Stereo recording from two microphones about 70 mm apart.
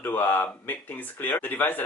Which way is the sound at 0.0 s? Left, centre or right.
Left.